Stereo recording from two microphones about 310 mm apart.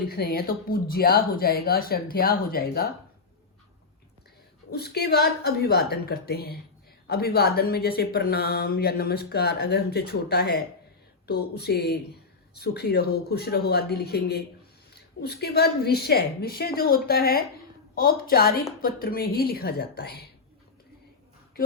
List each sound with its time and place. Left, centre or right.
0.0 s speech: left
4.7 s speech: left